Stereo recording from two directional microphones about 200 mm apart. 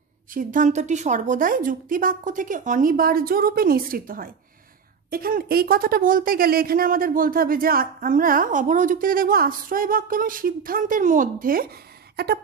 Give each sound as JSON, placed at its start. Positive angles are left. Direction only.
{"t": 0.3, "sound": "a woman's voice", "side_deg": -40}